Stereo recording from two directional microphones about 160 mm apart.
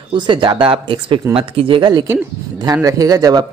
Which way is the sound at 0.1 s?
30° right (ahead or behind).